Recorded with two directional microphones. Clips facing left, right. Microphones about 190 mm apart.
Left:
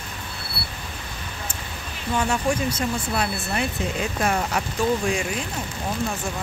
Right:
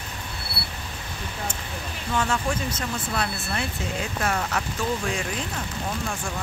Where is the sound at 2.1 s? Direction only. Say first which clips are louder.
Left 3 dB; 15° left (ahead or behind).